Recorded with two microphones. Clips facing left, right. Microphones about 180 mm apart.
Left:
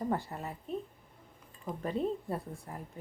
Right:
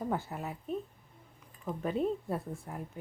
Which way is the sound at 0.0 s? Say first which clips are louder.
Left 1 dB; centre (ahead or behind).